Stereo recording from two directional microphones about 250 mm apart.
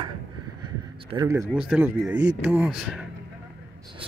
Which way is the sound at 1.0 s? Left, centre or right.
Centre.